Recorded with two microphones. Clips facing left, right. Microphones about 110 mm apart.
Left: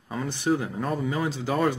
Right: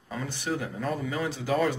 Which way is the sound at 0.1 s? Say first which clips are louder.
Left 6 dB; 25° left (ahead or behind).